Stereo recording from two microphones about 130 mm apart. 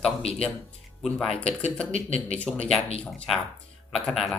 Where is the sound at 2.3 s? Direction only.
5° left (ahead or behind).